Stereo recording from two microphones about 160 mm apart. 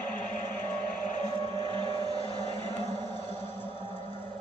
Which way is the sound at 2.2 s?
25° right (ahead or behind).